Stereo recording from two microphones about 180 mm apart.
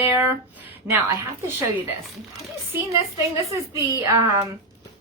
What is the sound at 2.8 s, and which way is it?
Speech, 15° right (ahead or behind).